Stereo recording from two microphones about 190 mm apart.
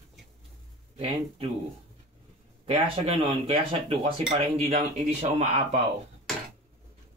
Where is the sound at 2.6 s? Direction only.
30° right (ahead or behind).